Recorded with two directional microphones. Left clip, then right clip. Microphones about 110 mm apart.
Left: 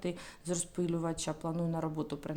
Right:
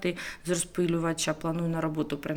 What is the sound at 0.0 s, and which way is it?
Speech, 25° left (ahead or behind).